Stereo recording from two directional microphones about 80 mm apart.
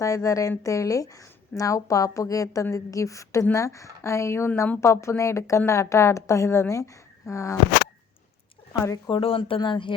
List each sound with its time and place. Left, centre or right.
0.0 s a woman's voice: left
9.0 s speech: left